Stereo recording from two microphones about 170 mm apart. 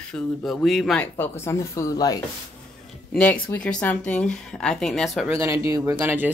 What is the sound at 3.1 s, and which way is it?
Speech, 10° left (ahead or behind).